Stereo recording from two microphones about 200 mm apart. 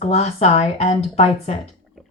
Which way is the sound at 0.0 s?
30° left (ahead or behind).